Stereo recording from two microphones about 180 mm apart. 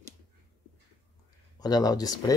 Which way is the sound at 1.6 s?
20° left (ahead or behind).